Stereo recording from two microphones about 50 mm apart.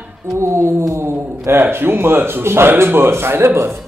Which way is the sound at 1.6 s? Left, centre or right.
Right.